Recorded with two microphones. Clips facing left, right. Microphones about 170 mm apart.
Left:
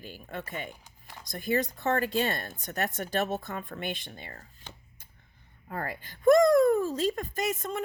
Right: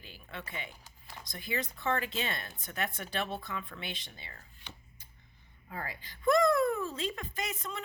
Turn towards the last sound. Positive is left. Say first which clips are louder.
# left 8 dB
turn(degrees=45)  # may be behind; listen again after turning